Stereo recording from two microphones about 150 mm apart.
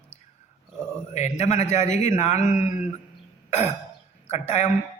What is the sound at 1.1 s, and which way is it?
A man's voice, 50° left (ahead or behind).